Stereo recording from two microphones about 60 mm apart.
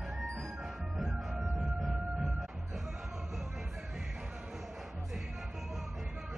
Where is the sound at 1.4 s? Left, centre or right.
Centre.